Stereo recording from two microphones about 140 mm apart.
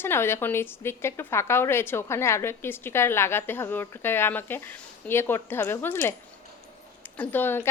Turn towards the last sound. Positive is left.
turn(degrees=15)  # may be behind; listen again after turning